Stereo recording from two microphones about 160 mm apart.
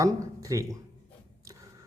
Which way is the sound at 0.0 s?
20° right (ahead or behind).